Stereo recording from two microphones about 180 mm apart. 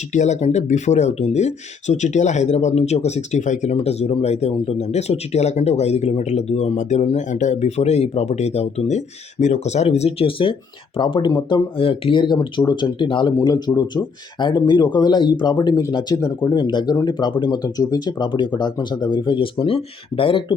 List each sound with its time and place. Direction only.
0.1 s speech: 40° left (ahead or behind)